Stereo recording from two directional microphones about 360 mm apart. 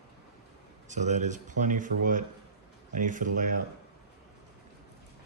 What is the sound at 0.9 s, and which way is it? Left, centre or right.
Speech, centre.